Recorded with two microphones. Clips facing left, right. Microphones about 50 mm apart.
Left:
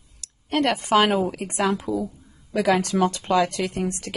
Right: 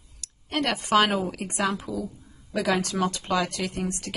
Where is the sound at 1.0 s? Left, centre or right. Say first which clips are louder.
Left 2 dB; left.